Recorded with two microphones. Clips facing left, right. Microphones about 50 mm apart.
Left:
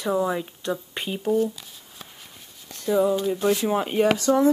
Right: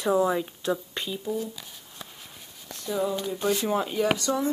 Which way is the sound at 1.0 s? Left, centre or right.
Centre.